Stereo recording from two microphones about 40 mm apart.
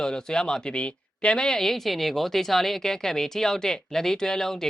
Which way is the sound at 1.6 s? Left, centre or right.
Centre.